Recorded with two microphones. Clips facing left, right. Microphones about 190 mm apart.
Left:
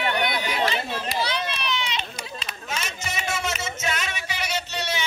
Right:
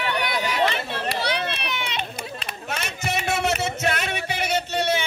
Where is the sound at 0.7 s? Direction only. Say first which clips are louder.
Even; 65° right (ahead or behind).